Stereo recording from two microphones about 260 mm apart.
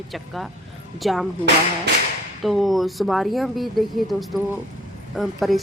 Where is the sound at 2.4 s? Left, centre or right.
Centre.